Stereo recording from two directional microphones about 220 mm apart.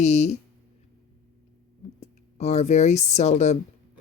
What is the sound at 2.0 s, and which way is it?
Speech, 30° left (ahead or behind).